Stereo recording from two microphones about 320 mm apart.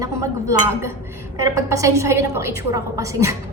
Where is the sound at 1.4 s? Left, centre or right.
Centre.